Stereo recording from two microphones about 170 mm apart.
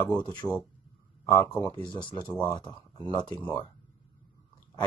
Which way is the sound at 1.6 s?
25° left (ahead or behind).